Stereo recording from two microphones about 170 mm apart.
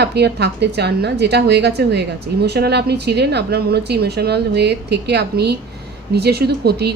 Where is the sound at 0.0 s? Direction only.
75° right (ahead or behind).